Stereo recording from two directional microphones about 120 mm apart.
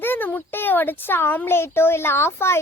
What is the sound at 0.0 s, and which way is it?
A child's voice, 15° left (ahead or behind).